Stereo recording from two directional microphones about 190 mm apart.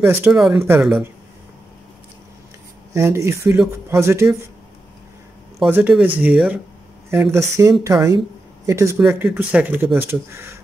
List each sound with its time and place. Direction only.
0.0 s speech: 15° right (ahead or behind)
0.3 s speech: centre (ahead or behind)
2.9 s speech: 15° right (ahead or behind)
5.6 s speech: 10° right (ahead or behind)